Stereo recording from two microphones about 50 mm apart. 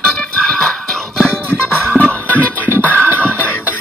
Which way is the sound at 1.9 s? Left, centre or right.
Left.